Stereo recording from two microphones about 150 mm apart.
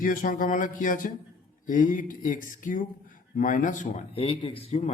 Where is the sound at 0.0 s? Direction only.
65° left (ahead or behind).